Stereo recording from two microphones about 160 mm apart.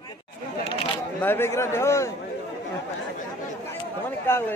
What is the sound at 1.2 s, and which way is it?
Speech, 15° left (ahead or behind).